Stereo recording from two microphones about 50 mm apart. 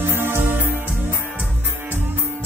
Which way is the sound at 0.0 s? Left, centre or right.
Right.